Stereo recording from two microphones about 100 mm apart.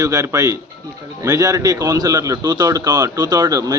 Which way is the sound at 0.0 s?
35° right (ahead or behind).